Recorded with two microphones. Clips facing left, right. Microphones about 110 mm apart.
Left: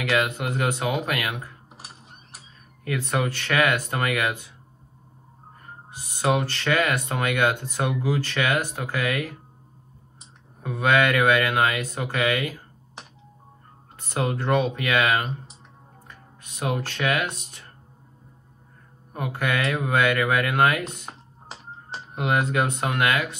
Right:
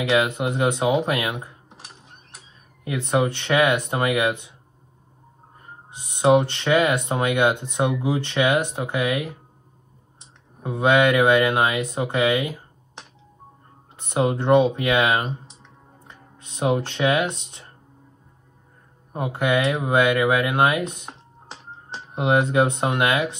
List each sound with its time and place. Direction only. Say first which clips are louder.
0.0 s speech: right 4 dB; 25° right (ahead or behind)
1.7 s mechanisms: even; centre (ahead or behind)
2.8 s speech: right 4 dB; 25° right (ahead or behind)
5.9 s speech: right 6 dB; 25° right (ahead or behind)
10.6 s speech: right 3 dB; 25° right (ahead or behind)
13.9 s speech: right 5 dB; 25° right (ahead or behind)
19.1 s speech: right 5 dB; 25° right (ahead or behind)
21.5 s music: even; 5° left (ahead or behind)
22.1 s speech: right 4 dB; 25° right (ahead or behind)